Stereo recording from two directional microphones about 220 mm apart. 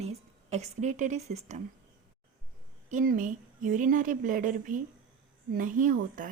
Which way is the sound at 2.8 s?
35° right (ahead or behind).